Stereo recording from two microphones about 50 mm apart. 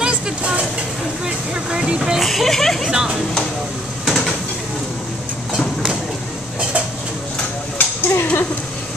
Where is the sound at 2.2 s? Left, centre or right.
Centre.